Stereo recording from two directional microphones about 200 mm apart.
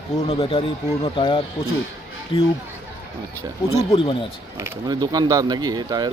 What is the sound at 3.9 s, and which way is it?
Speech, 25° left (ahead or behind).